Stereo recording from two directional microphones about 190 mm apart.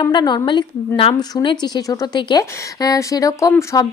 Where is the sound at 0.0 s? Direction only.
20° left (ahead or behind).